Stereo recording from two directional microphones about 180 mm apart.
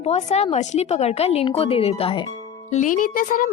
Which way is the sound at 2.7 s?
45° left (ahead or behind).